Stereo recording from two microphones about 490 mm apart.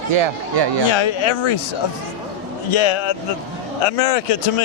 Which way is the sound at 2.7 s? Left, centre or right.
Left.